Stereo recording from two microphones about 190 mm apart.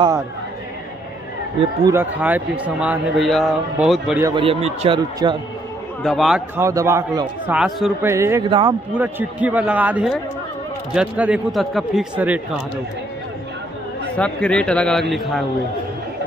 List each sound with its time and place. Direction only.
1.9 s a man's voice: 10° right (ahead or behind)
4.2 s a man's voice: 25° right (ahead or behind)
6.0 s a man's voice: centre (ahead or behind)
6.5 s a man's voice: 15° right (ahead or behind)
7.5 s a man's voice: centre (ahead or behind)
8.0 s a man's voice: 15° right (ahead or behind)
8.5 s a man's voice: 25° right (ahead or behind)
8.9 s a man's voice: 10° right (ahead or behind)
14.1 s a man's voice: 5° left (ahead or behind)